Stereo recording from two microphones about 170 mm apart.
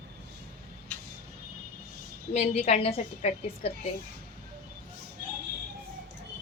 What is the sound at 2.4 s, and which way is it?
A woman's voice, 40° left (ahead or behind).